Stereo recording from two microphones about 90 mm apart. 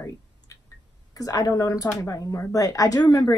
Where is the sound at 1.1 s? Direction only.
40° left (ahead or behind).